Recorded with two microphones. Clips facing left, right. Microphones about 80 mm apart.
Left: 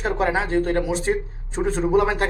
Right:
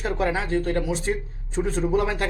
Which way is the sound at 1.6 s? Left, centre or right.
Left.